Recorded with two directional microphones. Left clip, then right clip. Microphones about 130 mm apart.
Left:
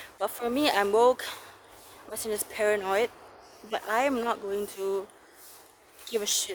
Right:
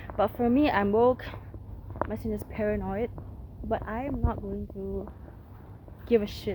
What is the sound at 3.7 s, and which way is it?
Speech, 40° left (ahead or behind).